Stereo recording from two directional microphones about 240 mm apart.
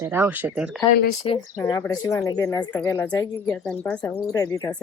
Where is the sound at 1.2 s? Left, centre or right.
Left.